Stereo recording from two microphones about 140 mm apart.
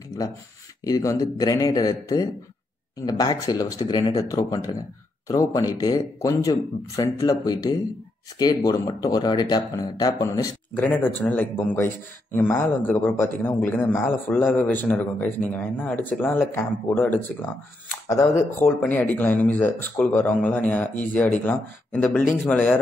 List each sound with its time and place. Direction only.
0.8 s speech: 25° left (ahead or behind)
10.7 s a man's voice: 10° left (ahead or behind)
18.8 s a man's voice: 10° left (ahead or behind)